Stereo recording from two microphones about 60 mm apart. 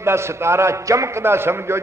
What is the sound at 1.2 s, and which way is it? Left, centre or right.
Speech, right.